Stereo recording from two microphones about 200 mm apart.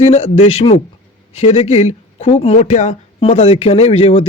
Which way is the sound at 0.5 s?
30° left (ahead or behind).